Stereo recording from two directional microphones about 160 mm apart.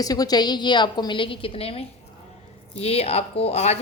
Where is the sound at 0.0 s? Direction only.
25° left (ahead or behind).